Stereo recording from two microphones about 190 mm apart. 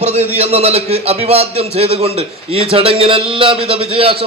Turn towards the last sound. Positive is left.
turn(degrees=-30)  # may be behind; listen again after turning